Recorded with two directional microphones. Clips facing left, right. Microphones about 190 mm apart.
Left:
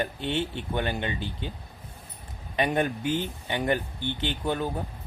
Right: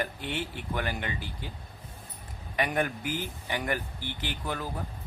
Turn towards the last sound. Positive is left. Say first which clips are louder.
# left 6 dB
turn(degrees=25)  # may be behind; listen again after turning